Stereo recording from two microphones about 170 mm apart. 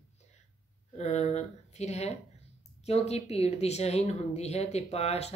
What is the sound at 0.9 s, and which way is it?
Speech, 40° left (ahead or behind).